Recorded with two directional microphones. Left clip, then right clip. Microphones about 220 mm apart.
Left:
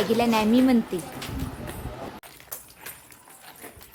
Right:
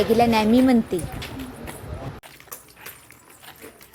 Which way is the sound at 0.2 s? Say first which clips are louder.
Right 4 dB; 15° right (ahead or behind).